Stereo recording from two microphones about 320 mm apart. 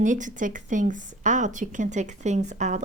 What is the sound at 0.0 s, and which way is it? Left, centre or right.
Speech, right.